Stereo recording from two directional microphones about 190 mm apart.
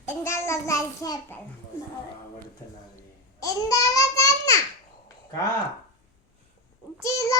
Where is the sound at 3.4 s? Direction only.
20° left (ahead or behind).